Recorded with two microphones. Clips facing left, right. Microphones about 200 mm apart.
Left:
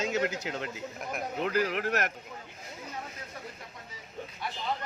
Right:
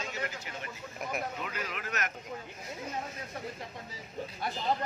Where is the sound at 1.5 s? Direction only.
65° left (ahead or behind).